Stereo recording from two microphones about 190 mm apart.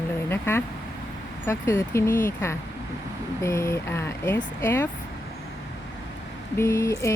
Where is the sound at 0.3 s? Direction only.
10° left (ahead or behind).